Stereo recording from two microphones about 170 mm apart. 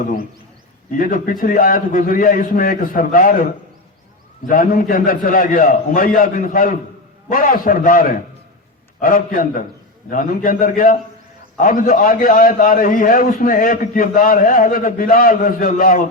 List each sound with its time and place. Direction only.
0.9 s a man's voice: 55° left (ahead or behind)